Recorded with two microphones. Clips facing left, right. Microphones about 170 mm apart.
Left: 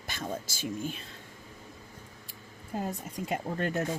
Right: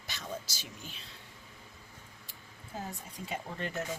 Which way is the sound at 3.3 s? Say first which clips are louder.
Left 7 dB; 50° left (ahead or behind).